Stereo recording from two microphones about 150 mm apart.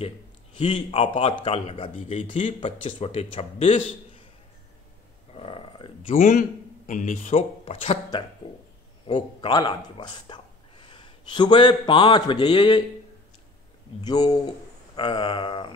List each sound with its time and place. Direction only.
0.6 s speech: 35° left (ahead or behind)
5.3 s a sound: 40° left (ahead or behind)
6.1 s a man's voice: 60° left (ahead or behind)
9.0 s a man's voice: 35° left (ahead or behind)
14.0 s speech: 25° left (ahead or behind)